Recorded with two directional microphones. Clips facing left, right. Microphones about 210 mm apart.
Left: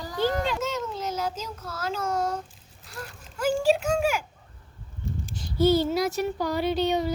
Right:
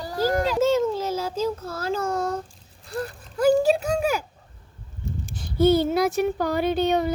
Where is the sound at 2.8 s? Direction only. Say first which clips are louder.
Right 10 dB; 30° right (ahead or behind).